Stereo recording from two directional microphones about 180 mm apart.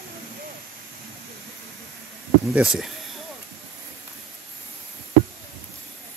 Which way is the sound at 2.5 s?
5° right (ahead or behind).